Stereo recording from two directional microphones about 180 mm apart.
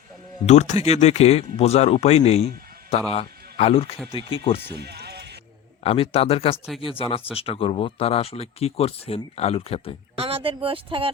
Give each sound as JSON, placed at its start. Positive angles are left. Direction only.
{"t": 0.4, "sound": "a man's voice", "side_deg": 40}
{"t": 4.7, "sound": "music", "side_deg": -65}
{"t": 5.8, "sound": "speech", "side_deg": 35}
{"t": 10.2, "sound": "speech", "side_deg": -30}